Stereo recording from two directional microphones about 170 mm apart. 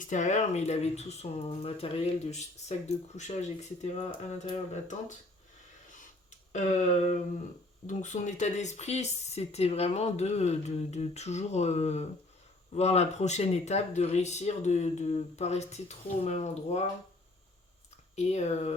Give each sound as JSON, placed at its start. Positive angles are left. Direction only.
{"t": 0.0, "sound": "speech", "side_deg": 45}
{"t": 6.5, "sound": "speech", "side_deg": 45}
{"t": 18.2, "sound": "speech", "side_deg": 40}